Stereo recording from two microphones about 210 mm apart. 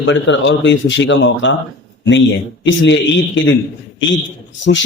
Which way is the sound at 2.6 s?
60° left (ahead or behind).